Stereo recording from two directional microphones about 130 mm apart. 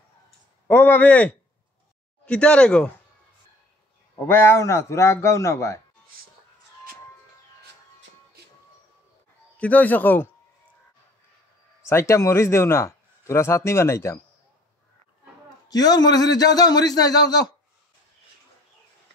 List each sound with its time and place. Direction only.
0.7 s speech: 15° left (ahead or behind)
4.1 s speech: 20° left (ahead or behind)
9.6 s speech: 10° left (ahead or behind)
11.8 s speech: 20° left (ahead or behind)
15.7 s speech: 30° left (ahead or behind)